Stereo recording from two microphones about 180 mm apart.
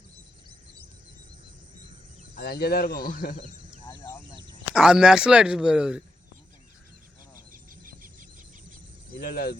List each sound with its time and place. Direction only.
2.3 s a man's voice: 55° left (ahead or behind)
3.8 s a sound: 20° left (ahead or behind)
4.7 s speech: 5° right (ahead or behind)
7.5 s cricket: 50° right (ahead or behind)
9.2 s a man's voice: 60° left (ahead or behind)